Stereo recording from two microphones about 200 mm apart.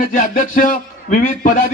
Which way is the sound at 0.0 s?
40° left (ahead or behind).